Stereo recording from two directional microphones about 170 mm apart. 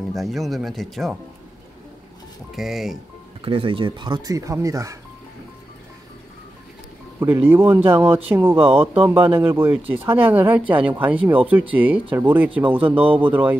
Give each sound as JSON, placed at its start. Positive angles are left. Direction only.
{"t": 0.1, "sound": "speech", "side_deg": 0}
{"t": 2.5, "sound": "speech", "side_deg": 0}
{"t": 3.4, "sound": "speech", "side_deg": -30}
{"t": 7.2, "sound": "speech", "side_deg": -15}
{"t": 8.5, "sound": "speech", "side_deg": -35}
{"t": 9.0, "sound": "speech", "side_deg": -10}
{"t": 12.9, "sound": "speech", "side_deg": -35}
{"t": 13.2, "sound": "speech", "side_deg": -10}